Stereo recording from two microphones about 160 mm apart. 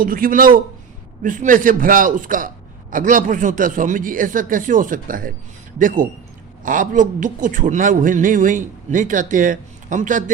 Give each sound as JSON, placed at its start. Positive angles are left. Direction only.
{"t": 0.0, "sound": "a man's voice", "side_deg": -60}